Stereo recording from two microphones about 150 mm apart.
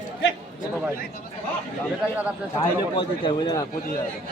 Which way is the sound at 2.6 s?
30° left (ahead or behind).